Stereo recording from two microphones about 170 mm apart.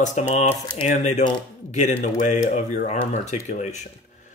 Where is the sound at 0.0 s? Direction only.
45° left (ahead or behind).